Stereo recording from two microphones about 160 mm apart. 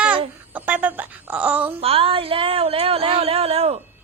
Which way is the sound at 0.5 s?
10° right (ahead or behind).